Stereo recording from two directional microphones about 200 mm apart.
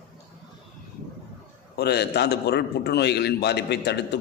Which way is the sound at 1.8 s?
55° left (ahead or behind).